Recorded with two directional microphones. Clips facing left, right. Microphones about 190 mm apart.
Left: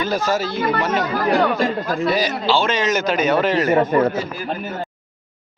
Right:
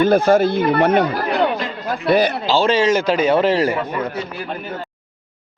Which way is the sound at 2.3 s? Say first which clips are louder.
Right 3 dB; 35° right (ahead or behind).